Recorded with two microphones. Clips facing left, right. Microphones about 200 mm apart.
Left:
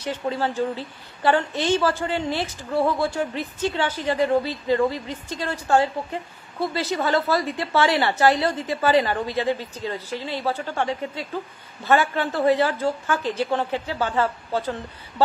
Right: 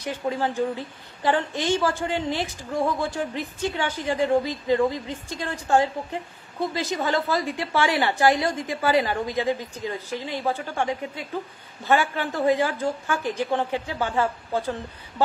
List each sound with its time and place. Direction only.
0.0 s a woman's voice: 15° right (ahead or behind)